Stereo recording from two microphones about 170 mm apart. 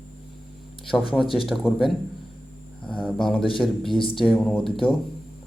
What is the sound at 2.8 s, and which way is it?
Speech, 5° left (ahead or behind).